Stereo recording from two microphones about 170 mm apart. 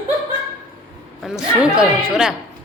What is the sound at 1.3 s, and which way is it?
Speech, 5° right (ahead or behind).